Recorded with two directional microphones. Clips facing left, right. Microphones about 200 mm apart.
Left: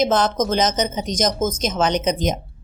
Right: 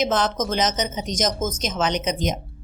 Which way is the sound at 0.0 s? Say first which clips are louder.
Left 4 dB; 40° left (ahead or behind).